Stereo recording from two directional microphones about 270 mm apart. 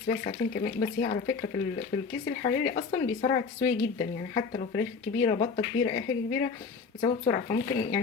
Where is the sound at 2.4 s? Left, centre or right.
Left.